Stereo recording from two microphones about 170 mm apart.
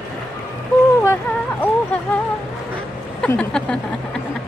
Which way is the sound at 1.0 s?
15° left (ahead or behind).